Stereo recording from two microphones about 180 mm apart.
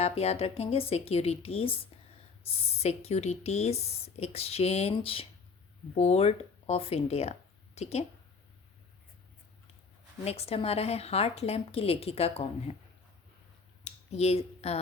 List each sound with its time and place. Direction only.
0.0 s speech: 35° left (ahead or behind)
10.2 s speech: 35° left (ahead or behind)
13.8 s speech: 35° left (ahead or behind)